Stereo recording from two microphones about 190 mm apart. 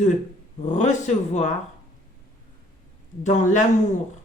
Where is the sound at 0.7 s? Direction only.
40° left (ahead or behind).